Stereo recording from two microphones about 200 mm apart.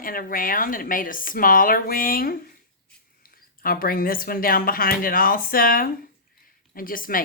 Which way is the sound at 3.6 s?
45° left (ahead or behind).